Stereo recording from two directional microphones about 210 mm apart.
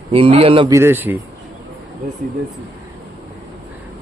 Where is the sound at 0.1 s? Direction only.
25° right (ahead or behind).